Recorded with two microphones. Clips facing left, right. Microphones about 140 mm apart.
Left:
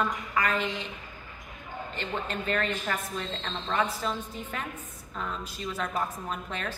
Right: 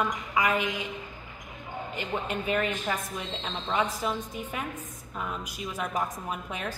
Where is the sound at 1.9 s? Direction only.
10° right (ahead or behind).